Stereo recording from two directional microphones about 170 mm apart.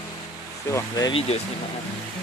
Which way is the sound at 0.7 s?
20° left (ahead or behind).